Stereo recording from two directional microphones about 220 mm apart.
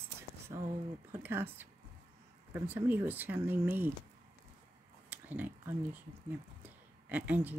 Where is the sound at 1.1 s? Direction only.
10° right (ahead or behind).